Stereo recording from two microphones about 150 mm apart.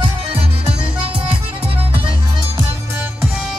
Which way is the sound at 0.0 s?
40° right (ahead or behind).